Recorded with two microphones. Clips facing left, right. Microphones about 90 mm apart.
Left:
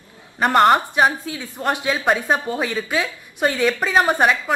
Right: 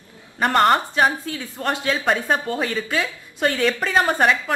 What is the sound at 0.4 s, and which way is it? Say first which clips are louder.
A woman's voice: left 2 dB; 5° left (ahead or behind).